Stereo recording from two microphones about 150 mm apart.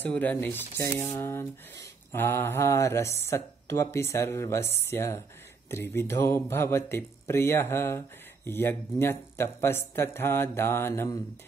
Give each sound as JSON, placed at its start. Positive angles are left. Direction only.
{"t": 0.0, "sound": "speech", "side_deg": 10}